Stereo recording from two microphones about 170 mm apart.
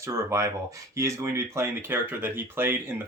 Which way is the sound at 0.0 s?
15° right (ahead or behind).